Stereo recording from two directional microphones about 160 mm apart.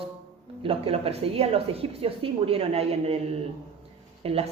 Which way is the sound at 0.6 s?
35° right (ahead or behind).